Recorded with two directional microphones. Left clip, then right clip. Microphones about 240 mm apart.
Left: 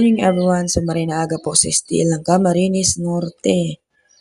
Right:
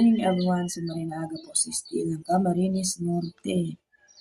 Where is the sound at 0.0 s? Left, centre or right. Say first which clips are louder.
Left 8 dB; left.